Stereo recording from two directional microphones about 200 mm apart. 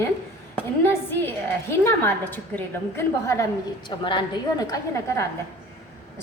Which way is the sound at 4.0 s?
25° left (ahead or behind).